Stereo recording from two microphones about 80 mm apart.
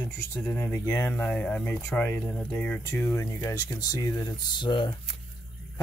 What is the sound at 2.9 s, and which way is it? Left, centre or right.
Speech, left.